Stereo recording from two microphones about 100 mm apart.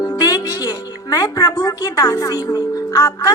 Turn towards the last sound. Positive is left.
turn(degrees=35)  # may be behind; listen again after turning